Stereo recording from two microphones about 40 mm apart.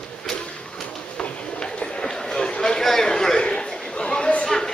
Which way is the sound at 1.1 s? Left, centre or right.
Left.